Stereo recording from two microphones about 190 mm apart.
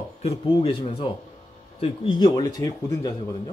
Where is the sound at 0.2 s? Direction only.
30° left (ahead or behind).